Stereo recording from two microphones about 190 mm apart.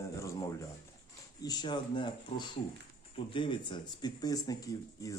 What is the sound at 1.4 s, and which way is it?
Speech, 25° left (ahead or behind).